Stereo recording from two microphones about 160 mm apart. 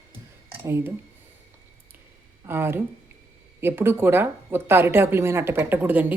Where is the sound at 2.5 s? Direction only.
15° right (ahead or behind).